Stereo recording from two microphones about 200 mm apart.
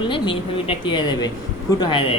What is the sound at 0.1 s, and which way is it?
Speech, 25° left (ahead or behind).